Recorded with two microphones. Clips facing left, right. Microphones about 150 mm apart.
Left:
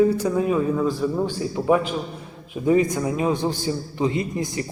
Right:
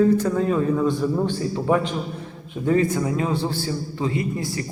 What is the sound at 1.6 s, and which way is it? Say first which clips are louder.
A man's voice: left 3 dB; 15° left (ahead or behind).